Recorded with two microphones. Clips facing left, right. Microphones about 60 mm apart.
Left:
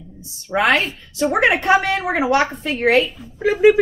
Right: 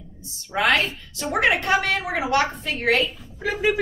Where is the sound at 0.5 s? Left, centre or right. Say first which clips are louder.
Left 4 dB; left.